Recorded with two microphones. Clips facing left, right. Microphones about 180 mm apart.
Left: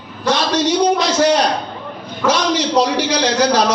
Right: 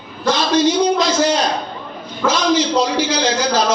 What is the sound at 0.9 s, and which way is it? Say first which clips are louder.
A man's voice: left 2 dB; 65° left (ahead or behind).